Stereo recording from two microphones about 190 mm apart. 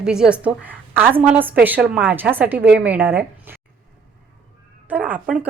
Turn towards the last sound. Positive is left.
turn(degrees=-5)  # may be behind; listen again after turning